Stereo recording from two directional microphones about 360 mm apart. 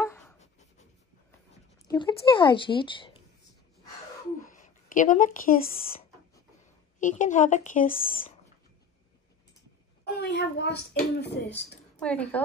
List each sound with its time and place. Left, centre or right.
0.0 s writing: centre
1.9 s speech: centre
4.5 s a sound: left
7.0 s speech: left
10.1 s speech: left
12.0 s speech: centre